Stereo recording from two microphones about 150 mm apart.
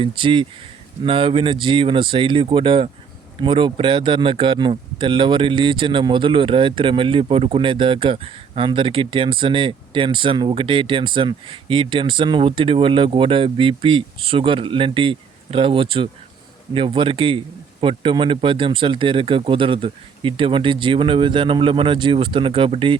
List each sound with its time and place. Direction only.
0.0 s speech: 35° right (ahead or behind)